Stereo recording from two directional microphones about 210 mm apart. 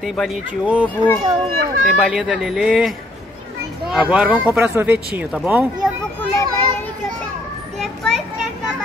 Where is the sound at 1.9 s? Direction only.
Centre (ahead or behind).